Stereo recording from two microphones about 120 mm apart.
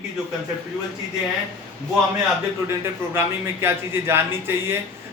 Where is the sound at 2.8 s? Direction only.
20° right (ahead or behind).